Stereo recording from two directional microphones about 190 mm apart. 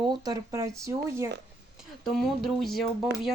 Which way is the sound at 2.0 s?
Centre (ahead or behind).